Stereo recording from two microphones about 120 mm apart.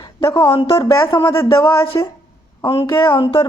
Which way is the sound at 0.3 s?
45° left (ahead or behind).